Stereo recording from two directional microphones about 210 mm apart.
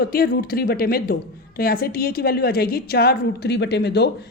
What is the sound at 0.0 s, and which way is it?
A woman's voice, 45° left (ahead or behind).